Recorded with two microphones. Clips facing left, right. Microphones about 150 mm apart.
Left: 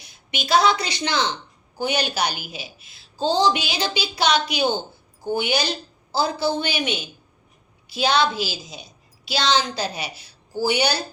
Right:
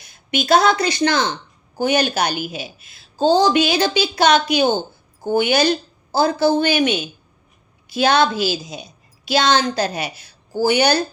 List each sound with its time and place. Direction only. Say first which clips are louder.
0.0 s a woman's voice: right 9 dB; 50° right (ahead or behind)